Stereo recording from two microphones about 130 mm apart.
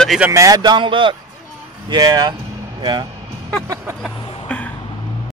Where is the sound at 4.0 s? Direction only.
10° left (ahead or behind).